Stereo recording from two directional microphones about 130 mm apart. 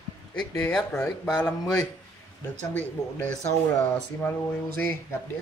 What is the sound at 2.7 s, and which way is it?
Speech, 10° left (ahead or behind).